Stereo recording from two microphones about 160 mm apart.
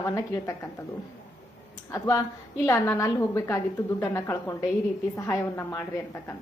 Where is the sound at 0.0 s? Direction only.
20° left (ahead or behind).